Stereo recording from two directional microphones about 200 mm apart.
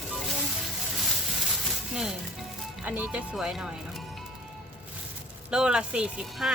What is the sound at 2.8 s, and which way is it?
Speech, 10° right (ahead or behind).